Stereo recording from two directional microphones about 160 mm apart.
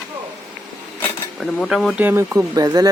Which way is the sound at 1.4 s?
Centre (ahead or behind).